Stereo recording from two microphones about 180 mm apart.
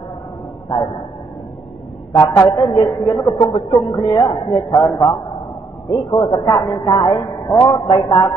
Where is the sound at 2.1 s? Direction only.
20° left (ahead or behind).